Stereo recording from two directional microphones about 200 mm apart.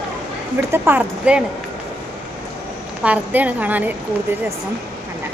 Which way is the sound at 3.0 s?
5° right (ahead or behind).